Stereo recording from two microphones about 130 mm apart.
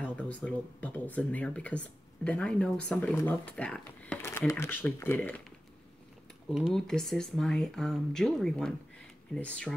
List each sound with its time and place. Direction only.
0.0 s speech: 10° left (ahead or behind)
4.2 s speech: 20° left (ahead or behind)
6.7 s speech: 5° left (ahead or behind)